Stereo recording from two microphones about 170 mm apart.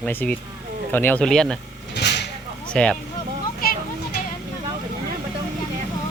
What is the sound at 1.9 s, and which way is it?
Vehicle, 80° left.